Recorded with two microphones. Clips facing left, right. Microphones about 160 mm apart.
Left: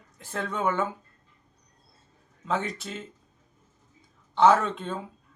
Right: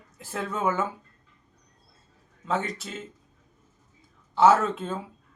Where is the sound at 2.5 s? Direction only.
Centre (ahead or behind).